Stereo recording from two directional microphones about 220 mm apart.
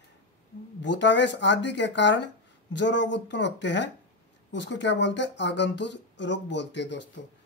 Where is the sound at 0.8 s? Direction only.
55° left (ahead or behind).